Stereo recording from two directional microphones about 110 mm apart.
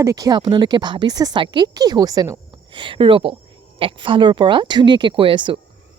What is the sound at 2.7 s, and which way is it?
Speech, 50° right (ahead or behind).